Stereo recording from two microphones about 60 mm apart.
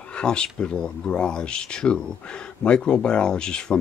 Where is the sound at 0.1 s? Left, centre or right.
Centre.